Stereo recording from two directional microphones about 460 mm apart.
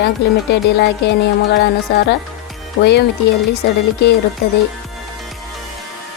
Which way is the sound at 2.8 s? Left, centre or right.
Left.